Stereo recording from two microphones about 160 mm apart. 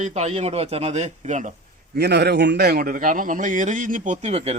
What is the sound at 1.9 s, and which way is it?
A man's voice, 90° right.